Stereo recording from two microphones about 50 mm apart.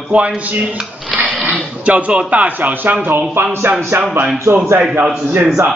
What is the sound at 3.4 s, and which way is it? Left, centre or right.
Speech, right.